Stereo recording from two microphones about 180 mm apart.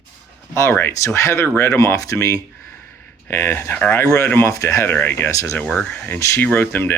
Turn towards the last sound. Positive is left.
turn(degrees=10)  # may be behind; listen again after turning